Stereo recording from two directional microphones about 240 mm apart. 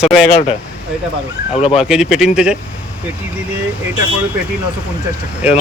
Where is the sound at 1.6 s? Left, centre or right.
Left.